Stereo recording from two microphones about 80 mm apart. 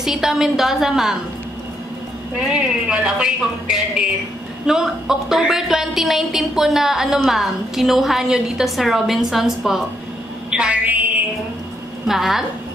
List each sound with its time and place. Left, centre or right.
0.0 s a woman's voice: centre
2.4 s a woman's voice: centre
10.5 s a woman's voice: centre
12.1 s a woman's voice: centre